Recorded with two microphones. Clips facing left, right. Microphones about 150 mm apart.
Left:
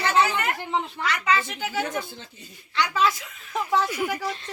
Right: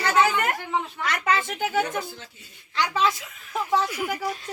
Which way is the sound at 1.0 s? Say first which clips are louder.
Even; 50° right (ahead or behind).